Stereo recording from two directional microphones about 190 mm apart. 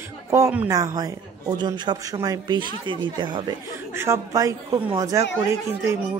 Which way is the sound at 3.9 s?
15° right (ahead or behind).